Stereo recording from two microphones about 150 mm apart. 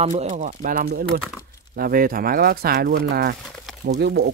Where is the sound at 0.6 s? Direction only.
75° right (ahead or behind).